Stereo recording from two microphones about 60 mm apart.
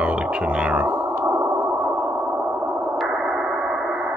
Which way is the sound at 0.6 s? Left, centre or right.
Right.